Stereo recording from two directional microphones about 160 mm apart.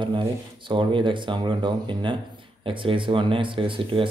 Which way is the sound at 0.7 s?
30° right (ahead or behind).